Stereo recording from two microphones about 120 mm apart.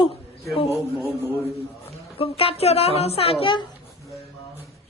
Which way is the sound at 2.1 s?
55° left (ahead or behind).